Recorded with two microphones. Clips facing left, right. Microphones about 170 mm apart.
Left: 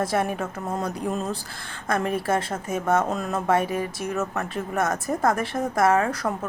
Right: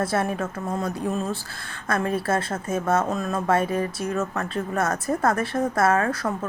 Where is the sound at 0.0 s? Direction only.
15° left (ahead or behind).